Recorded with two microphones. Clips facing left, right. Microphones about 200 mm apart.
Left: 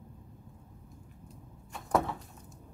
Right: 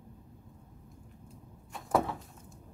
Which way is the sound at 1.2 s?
Centre (ahead or behind).